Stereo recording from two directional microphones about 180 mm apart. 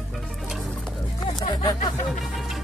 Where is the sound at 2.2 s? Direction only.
Centre (ahead or behind).